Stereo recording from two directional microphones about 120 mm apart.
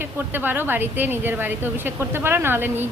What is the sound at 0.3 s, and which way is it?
A woman's voice, 15° right (ahead or behind).